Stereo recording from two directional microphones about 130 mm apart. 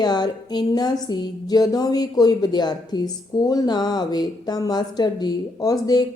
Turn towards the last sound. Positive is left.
turn(degrees=30)  # may be behind; listen again after turning